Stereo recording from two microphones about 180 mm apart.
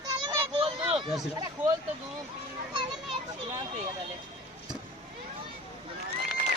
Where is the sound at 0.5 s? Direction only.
30° right (ahead or behind).